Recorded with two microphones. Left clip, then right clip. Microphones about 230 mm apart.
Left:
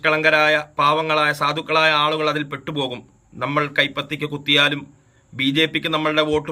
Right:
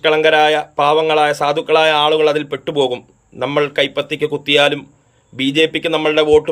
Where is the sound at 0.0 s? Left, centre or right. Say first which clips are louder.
Right 4 dB; centre.